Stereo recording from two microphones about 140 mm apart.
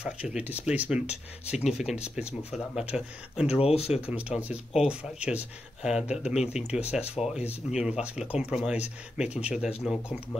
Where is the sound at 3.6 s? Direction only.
45° left (ahead or behind).